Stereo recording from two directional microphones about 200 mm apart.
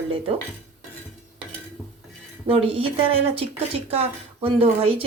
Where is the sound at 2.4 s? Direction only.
30° right (ahead or behind).